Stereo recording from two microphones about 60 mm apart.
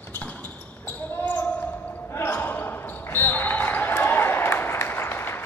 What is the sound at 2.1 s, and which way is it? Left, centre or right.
Basketball bounce, left.